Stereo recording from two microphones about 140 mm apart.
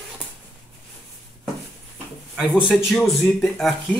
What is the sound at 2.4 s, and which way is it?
Speech, centre (ahead or behind).